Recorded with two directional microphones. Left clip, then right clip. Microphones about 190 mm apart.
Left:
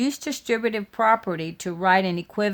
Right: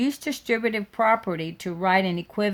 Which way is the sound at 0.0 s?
25° left (ahead or behind).